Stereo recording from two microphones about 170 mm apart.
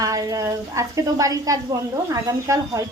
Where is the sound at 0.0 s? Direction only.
20° right (ahead or behind).